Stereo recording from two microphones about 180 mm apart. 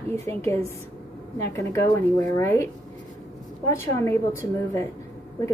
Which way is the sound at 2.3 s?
15° left (ahead or behind).